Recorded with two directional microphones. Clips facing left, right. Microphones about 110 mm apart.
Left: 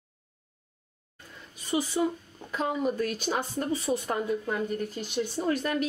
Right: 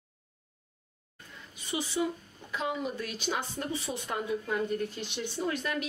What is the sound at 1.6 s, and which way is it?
A woman's voice, 45° left (ahead or behind).